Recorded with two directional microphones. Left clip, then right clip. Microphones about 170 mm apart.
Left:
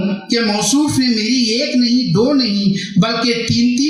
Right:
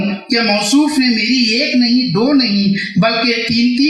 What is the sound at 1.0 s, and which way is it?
Speech, 20° left (ahead or behind).